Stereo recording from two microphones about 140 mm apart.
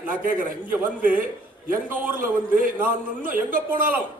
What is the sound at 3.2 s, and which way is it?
Speech, 80° right.